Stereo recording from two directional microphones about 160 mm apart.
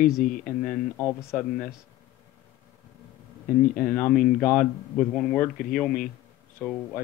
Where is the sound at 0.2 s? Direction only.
55° left (ahead or behind).